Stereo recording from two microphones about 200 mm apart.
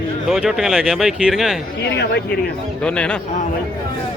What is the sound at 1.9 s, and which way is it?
Speech, 55° left (ahead or behind).